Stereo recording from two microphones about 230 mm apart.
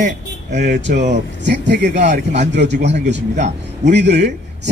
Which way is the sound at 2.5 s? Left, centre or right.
Right.